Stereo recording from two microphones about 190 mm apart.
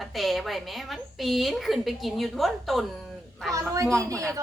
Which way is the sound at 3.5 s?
15° right (ahead or behind).